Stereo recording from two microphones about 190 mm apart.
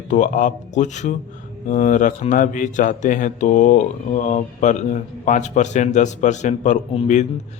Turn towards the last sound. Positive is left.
turn(degrees=35)  # may be behind; listen again after turning